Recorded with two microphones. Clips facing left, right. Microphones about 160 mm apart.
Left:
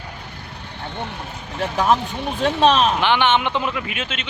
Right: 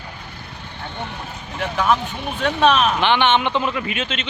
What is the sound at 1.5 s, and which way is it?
Speech, 35° left (ahead or behind).